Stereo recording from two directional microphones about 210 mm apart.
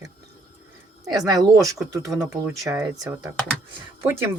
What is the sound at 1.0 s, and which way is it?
Speech, 15° right (ahead or behind).